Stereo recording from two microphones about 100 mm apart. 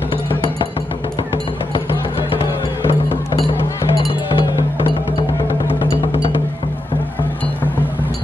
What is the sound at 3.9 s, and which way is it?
Music, 60° left (ahead or behind).